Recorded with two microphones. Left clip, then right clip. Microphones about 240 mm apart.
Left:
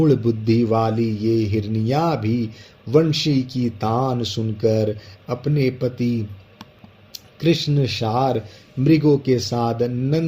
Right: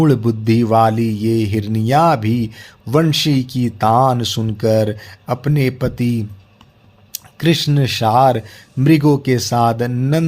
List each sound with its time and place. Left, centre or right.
0.0 s speech: right
7.3 s speech: right